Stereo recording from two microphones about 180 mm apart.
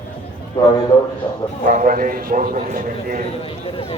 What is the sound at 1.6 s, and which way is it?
A man's voice, 45° right (ahead or behind).